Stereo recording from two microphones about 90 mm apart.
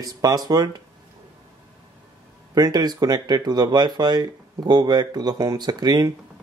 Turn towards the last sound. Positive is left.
turn(degrees=-45)  # may be behind; listen again after turning